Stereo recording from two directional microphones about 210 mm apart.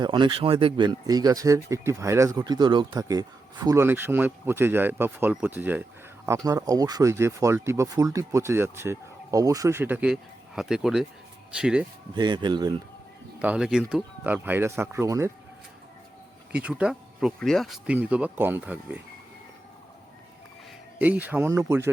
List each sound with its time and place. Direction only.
0.0 s speech: 20° right (ahead or behind); by 11.9 s 5° right (ahead or behind)
12.1 s speech: 20° right (ahead or behind)
13.4 s speech: 5° right (ahead or behind)
16.5 s speech: 5° right (ahead or behind)
21.0 s speech: 10° right (ahead or behind)